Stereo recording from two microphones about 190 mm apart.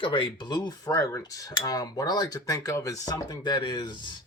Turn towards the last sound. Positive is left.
turn(degrees=25)  # may be behind; listen again after turning